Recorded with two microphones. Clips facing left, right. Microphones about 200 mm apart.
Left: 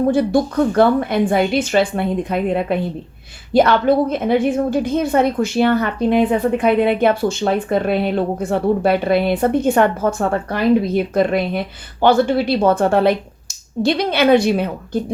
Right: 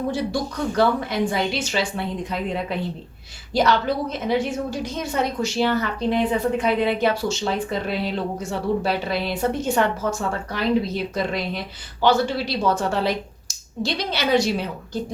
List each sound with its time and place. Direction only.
0.0 s a woman's voice: 55° left (ahead or behind)